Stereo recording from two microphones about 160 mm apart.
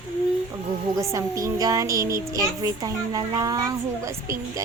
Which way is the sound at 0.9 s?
20° right (ahead or behind).